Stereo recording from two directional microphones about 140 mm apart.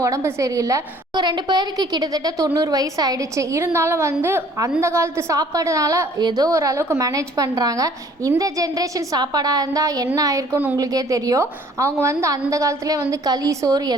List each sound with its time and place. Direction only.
0.0 s a woman's voice: 20° right (ahead or behind)